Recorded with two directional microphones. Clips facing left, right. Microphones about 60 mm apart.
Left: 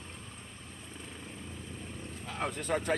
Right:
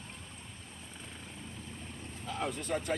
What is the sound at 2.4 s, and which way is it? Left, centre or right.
Vehicle, left.